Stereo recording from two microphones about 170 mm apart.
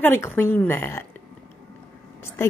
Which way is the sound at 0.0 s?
10° left (ahead or behind).